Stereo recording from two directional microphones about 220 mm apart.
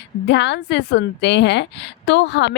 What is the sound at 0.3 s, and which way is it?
A woman's voice, 50° left (ahead or behind).